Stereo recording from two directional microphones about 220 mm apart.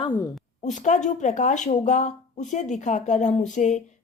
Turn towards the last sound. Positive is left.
turn(degrees=35)  # may be behind; listen again after turning